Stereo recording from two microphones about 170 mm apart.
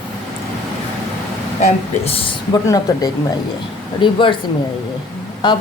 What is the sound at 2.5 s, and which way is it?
A woman's voice, 20° left (ahead or behind).